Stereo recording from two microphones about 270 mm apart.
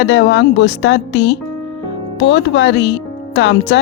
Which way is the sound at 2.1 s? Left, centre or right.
Left.